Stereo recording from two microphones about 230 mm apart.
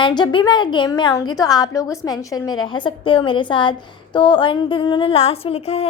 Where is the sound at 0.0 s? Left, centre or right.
Centre.